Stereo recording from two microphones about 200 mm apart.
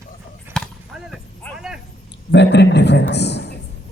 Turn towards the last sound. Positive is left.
turn(degrees=55)  # may be behind; listen again after turning